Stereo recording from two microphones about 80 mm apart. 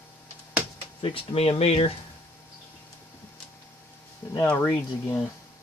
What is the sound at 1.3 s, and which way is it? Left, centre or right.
Speech, left.